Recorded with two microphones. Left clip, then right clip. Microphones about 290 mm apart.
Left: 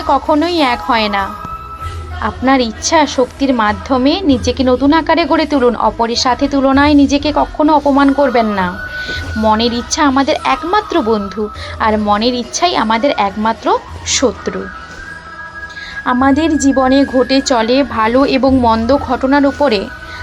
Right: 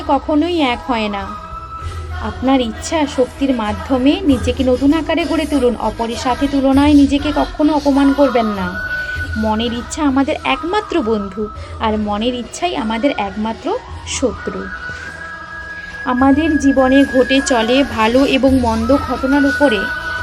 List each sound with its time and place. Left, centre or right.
0.1 s speech: centre
6.9 s a woman's voice: left
7.9 s speech: centre
13.0 s a woman's voice: left
13.2 s speech: centre
16.0 s a woman's voice: centre